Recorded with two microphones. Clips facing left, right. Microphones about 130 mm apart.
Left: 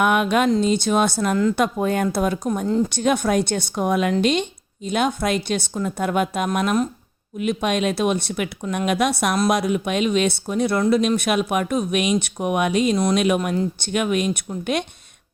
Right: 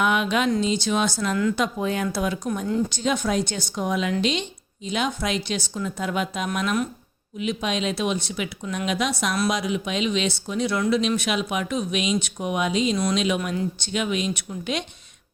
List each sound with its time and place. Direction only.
0.0 s speech: 50° left (ahead or behind)